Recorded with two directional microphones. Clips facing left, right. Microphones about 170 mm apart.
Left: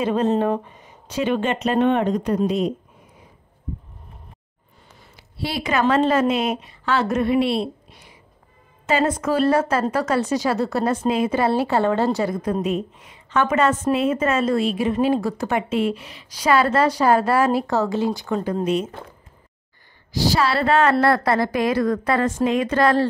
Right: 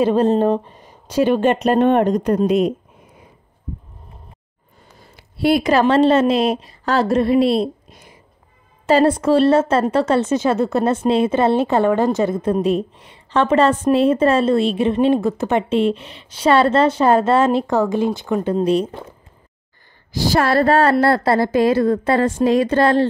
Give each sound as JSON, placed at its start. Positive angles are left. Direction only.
{"t": 0.1, "sound": "a woman's voice", "side_deg": -35}
{"t": 1.4, "sound": "speech", "side_deg": -45}
{"t": 5.1, "sound": "a sound", "side_deg": -50}
{"t": 5.7, "sound": "a woman's voice", "side_deg": -30}
{"t": 8.8, "sound": "a woman's voice", "side_deg": -35}
{"t": 18.5, "sound": "a woman's voice", "side_deg": -35}
{"t": 20.1, "sound": "a woman's voice", "side_deg": -50}